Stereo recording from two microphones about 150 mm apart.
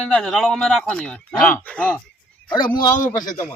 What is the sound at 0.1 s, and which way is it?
Speech, 5° left (ahead or behind).